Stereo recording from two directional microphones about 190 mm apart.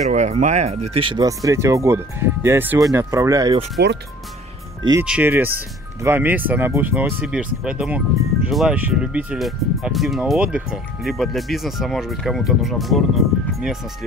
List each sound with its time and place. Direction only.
0.1 s speech: 40° right (ahead or behind); by 3.5 s 15° right (ahead or behind)
3.8 s speech: 60° right (ahead or behind)
5.0 s speech: 5° right (ahead or behind)